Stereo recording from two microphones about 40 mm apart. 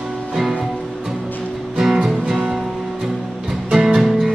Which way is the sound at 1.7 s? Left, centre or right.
Centre.